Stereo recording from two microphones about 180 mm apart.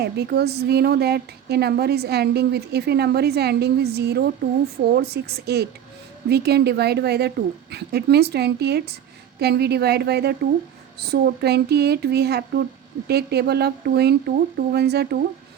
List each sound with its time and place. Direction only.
0.0 s a woman's voice: 65° right (ahead or behind)